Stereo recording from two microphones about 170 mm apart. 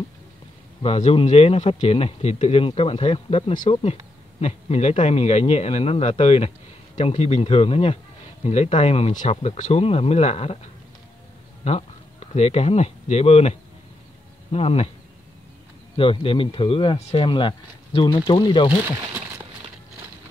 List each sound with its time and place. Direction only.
0.8 s speech: 40° left (ahead or behind)
16.0 s speech: 30° left (ahead or behind)